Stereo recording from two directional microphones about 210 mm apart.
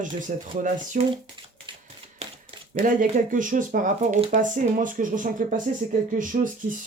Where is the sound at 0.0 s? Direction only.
35° right (ahead or behind).